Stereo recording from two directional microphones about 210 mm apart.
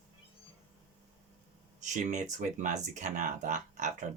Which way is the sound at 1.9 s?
35° right (ahead or behind).